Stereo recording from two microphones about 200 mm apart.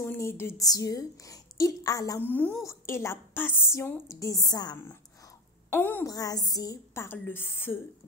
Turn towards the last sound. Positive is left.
turn(degrees=10)  # may be behind; listen again after turning